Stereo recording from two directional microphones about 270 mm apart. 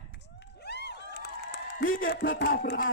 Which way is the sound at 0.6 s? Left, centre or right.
Left.